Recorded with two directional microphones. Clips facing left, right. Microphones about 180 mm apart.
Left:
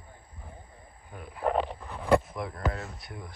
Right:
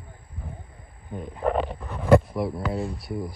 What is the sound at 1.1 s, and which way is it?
Speech, 30° right (ahead or behind).